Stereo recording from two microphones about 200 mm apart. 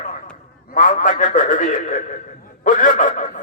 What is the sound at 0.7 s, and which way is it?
A man's voice, 40° left (ahead or behind).